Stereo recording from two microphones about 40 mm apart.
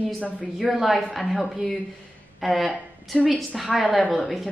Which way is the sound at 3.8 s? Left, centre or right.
Centre.